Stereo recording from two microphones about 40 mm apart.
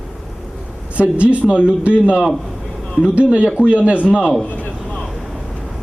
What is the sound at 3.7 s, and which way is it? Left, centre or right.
Speech, right.